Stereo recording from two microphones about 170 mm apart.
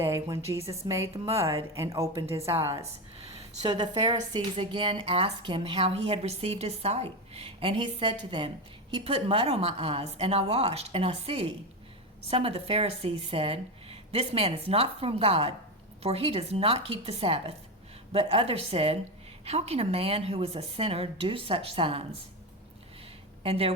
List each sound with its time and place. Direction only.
0.0 s a woman's voice: 15° right (ahead or behind)
2.6 s a woman's voice: 15° right (ahead or behind)
3.9 s speech: 35° right (ahead or behind)
23.4 s speech: 35° right (ahead or behind)